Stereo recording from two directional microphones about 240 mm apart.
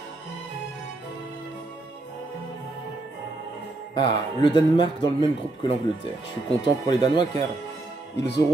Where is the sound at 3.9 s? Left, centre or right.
Centre.